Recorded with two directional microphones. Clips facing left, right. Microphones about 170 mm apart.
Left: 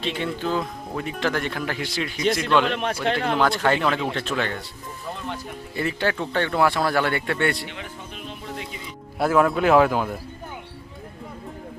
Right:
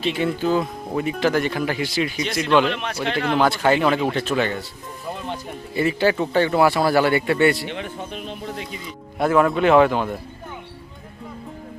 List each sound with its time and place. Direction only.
0.0 s speech: 5° right (ahead or behind)
2.7 s a man's voice: 45° left (ahead or behind)
3.3 s speech: 5° right (ahead or behind)
5.7 s speech: 5° right (ahead or behind)
9.1 s speech: centre (ahead or behind)